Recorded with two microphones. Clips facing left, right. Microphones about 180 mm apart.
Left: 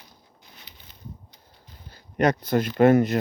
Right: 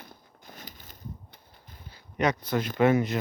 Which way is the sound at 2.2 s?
45° left (ahead or behind).